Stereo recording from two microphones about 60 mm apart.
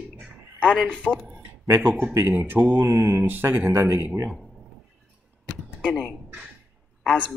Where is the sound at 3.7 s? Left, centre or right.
Right.